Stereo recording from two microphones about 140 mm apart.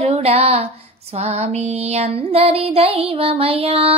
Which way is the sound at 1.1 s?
50° right (ahead or behind).